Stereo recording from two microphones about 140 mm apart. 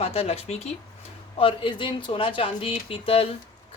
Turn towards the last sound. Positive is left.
turn(degrees=40)  # may be behind; listen again after turning